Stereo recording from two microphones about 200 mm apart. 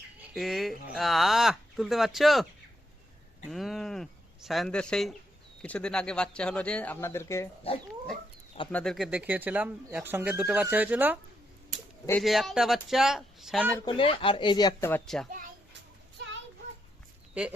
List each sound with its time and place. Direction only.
0.2 s speech: centre (ahead or behind)
3.5 s speech: centre (ahead or behind)
8.7 s speech: 5° left (ahead or behind)
12.2 s speech: centre (ahead or behind)
13.8 s speech: 25° left (ahead or behind); by 15.3 s centre (ahead or behind)
17.4 s speech: 5° right (ahead or behind)